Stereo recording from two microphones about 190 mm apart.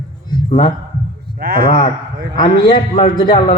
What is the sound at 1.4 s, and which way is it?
Speech, 55° right (ahead or behind).